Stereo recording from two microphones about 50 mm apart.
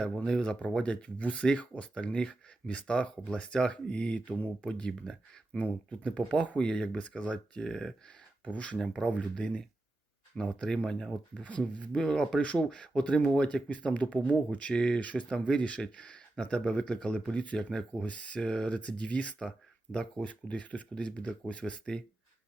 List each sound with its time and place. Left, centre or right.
0.3 s speech: centre
8.4 s speech: left
8.8 s speech: centre
9.0 s speech: left
10.6 s speech: centre
11.3 s speech: left
11.9 s speech: centre